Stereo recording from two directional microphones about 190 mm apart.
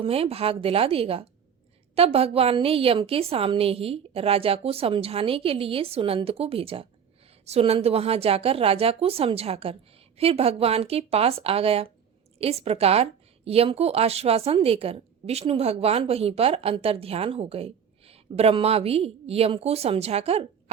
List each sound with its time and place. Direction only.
0.0 s a woman's voice: 30° right (ahead or behind)